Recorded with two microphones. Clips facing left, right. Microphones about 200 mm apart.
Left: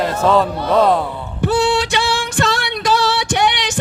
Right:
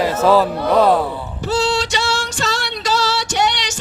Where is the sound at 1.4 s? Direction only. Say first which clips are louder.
Left 3 dB; 60° left (ahead or behind).